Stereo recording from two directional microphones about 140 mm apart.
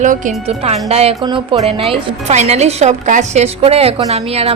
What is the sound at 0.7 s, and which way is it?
A woman's voice, 45° right (ahead or behind).